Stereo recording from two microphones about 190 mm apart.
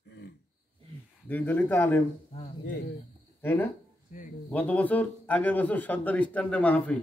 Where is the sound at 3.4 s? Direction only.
10° left (ahead or behind).